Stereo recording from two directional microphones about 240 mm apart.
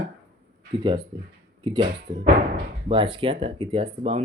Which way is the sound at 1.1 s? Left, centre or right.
Centre.